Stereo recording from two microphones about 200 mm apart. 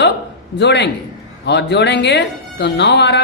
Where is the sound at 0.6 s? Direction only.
60° left (ahead or behind).